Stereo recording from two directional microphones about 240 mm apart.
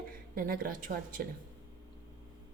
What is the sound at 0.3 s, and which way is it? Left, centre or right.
Speech, right.